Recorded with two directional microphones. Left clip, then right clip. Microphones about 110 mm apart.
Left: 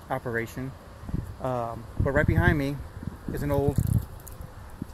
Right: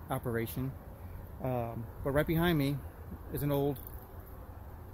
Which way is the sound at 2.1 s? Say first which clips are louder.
Left 5 dB; 25° right (ahead or behind).